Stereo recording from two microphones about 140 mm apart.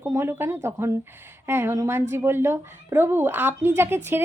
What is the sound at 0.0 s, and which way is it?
A woman's voice, 20° right (ahead or behind).